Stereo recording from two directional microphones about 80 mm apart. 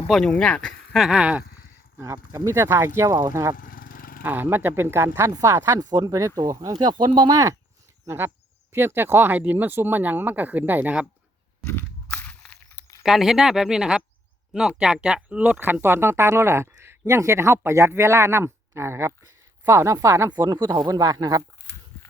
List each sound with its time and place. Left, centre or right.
0.1 s speech: centre
1.1 s speech: centre
2.3 s speech: right
3.1 s speech: right
4.2 s speech: right
5.7 s speech: right
6.5 s speech: right
6.9 s speech: right
8.0 s speech: right
11.6 s crunch: left
12.0 s a sound: centre
13.0 s speech: centre; by 20.3 s right
20.5 s speech: right